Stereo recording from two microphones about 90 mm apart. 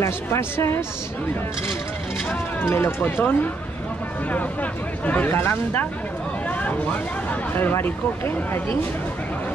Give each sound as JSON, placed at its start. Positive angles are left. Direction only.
{"t": 0.0, "sound": "speech", "side_deg": 30}
{"t": 2.7, "sound": "speech", "side_deg": 25}
{"t": 5.0, "sound": "speech", "side_deg": 20}
{"t": 7.5, "sound": "speech", "side_deg": 20}